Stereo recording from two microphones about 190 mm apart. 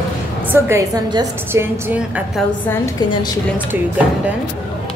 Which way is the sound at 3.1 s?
20° left (ahead or behind).